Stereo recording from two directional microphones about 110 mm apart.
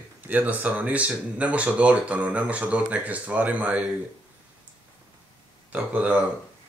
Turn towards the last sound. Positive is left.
turn(degrees=-15)  # may be behind; listen again after turning